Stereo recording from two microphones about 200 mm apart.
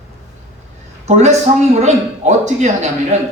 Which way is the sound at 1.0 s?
35° right (ahead or behind).